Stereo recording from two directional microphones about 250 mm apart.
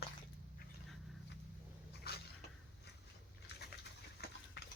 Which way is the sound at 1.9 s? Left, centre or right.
Left.